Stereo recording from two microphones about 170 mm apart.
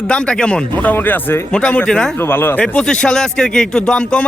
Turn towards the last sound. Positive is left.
turn(degrees=5)  # may be behind; listen again after turning